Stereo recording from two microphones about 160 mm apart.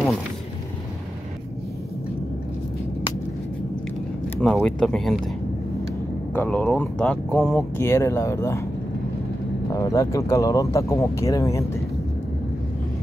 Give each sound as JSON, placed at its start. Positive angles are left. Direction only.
{"t": 4.4, "sound": "speech", "side_deg": 0}
{"t": 6.3, "sound": "speech", "side_deg": 10}
{"t": 7.7, "sound": "speech", "side_deg": 15}
{"t": 9.7, "sound": "speech", "side_deg": 20}